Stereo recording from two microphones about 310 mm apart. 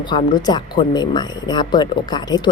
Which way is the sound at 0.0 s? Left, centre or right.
Centre.